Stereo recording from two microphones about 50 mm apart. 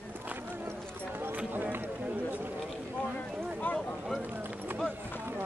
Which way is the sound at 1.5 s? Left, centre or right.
Right.